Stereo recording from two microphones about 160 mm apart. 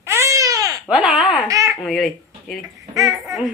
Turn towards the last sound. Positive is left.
turn(degrees=-20)  # may be behind; listen again after turning